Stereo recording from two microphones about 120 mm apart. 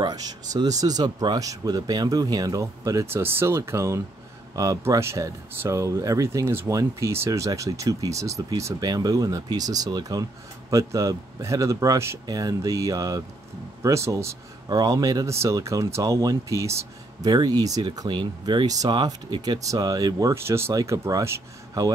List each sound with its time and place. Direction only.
0.0 s speech: 35° right (ahead or behind)